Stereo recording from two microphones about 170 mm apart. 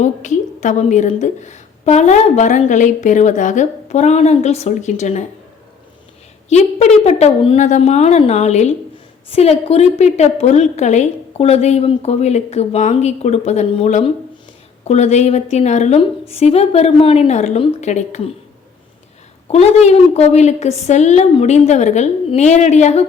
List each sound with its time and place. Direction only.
0.0 s a woman's voice: 45° left (ahead or behind)
6.5 s a woman's voice: 40° left (ahead or behind)
19.5 s a woman's voice: 40° left (ahead or behind)